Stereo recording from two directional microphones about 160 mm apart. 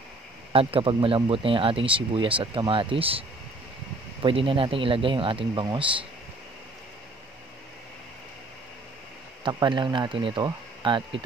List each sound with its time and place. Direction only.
0.5 s speech: 35° right (ahead or behind)
9.4 s speech: 30° right (ahead or behind)